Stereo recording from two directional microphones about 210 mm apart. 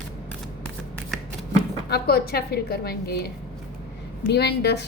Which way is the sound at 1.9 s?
45° left (ahead or behind).